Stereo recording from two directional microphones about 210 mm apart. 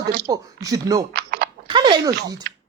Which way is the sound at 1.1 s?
50° right (ahead or behind).